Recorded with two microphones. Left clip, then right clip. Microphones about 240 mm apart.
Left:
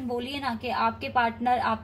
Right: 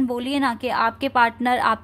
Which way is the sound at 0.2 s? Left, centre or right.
Right.